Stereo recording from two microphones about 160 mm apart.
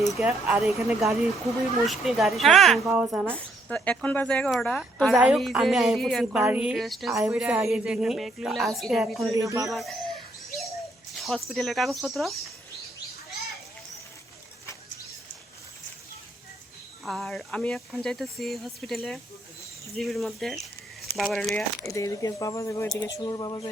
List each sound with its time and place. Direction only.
0.2 s speech: 10° right (ahead or behind)
3.3 s speech: 10° left (ahead or behind)
5.1 s speech: 5° right (ahead or behind)
9.4 s speech: 20° right (ahead or behind)
9.6 s speech: centre (ahead or behind)
11.2 s speech: centre (ahead or behind)
17.0 s speech: centre (ahead or behind)
21.8 s speech: 20° left (ahead or behind)